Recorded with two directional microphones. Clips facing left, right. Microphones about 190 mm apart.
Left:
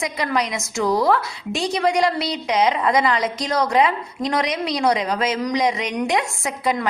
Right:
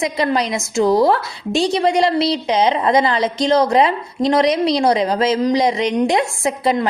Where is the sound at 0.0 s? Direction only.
25° right (ahead or behind).